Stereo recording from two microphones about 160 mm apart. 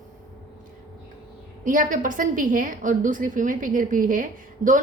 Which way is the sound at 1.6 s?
55° right (ahead or behind).